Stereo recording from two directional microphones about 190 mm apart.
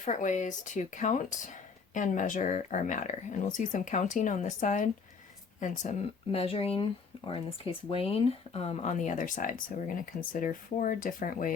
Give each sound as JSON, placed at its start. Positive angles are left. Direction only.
{"t": 0.0, "sound": "speech", "side_deg": 40}